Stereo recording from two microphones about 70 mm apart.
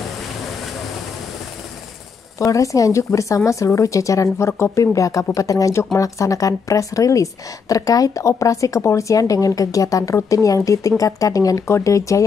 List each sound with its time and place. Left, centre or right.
2.3 s speech: left